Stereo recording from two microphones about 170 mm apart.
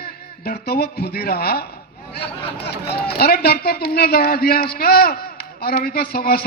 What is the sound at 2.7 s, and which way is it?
A man's voice, 70° left (ahead or behind).